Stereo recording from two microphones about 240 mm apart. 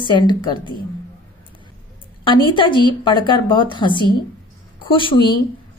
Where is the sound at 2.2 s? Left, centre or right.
Centre.